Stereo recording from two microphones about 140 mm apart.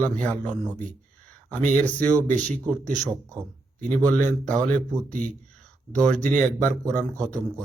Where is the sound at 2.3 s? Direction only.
60° right (ahead or behind).